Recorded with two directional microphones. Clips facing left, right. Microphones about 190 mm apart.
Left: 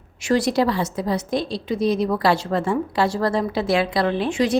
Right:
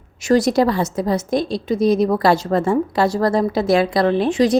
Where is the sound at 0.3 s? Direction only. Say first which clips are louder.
Right 4 dB; 45° right (ahead or behind).